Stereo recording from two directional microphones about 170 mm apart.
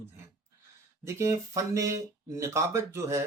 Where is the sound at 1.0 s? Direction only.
15° right (ahead or behind).